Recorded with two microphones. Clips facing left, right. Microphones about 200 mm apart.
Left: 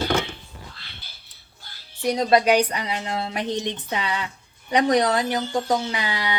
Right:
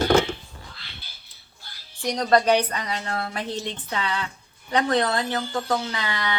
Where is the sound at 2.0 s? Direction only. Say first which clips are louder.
Left 2 dB; 5° left (ahead or behind).